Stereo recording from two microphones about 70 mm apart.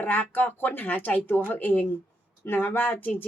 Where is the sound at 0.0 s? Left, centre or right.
Left.